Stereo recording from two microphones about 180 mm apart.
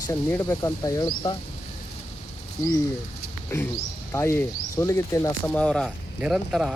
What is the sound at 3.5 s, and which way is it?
Speech, 15° left (ahead or behind).